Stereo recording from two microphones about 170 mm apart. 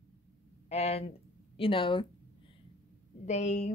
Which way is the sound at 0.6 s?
35° left (ahead or behind).